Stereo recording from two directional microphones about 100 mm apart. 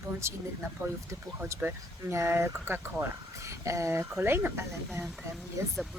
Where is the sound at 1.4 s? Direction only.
30° right (ahead or behind).